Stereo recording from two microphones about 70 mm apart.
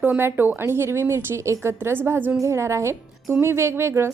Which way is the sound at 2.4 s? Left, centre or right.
Right.